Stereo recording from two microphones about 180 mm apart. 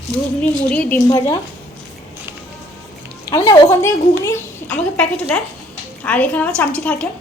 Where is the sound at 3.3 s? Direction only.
20° left (ahead or behind).